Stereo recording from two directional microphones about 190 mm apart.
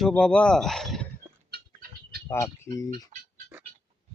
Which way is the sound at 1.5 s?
50° right (ahead or behind).